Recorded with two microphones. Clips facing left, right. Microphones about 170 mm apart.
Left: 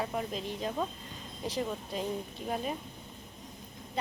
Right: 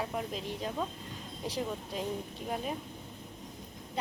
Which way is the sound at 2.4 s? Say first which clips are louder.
Left 1 dB; centre (ahead or behind).